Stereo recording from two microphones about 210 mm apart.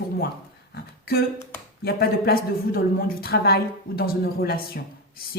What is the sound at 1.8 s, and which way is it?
A woman's voice, 50° left (ahead or behind).